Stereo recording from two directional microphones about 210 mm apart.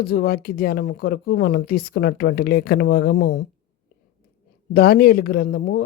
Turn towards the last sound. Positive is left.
turn(degrees=50)  # may be behind; listen again after turning